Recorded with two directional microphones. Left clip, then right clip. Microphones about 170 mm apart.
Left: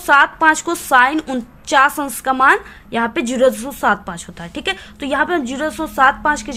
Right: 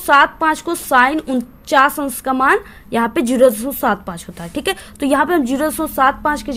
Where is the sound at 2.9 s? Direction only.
30° right (ahead or behind).